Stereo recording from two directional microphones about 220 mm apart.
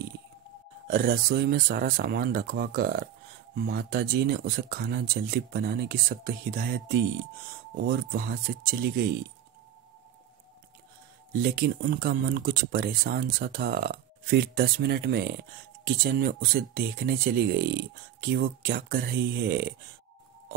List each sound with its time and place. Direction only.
0.8 s speech: 45° right (ahead or behind)
11.4 s speech: 45° right (ahead or behind)